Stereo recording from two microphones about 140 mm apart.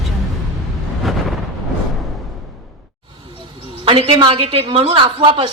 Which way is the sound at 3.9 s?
35° right (ahead or behind).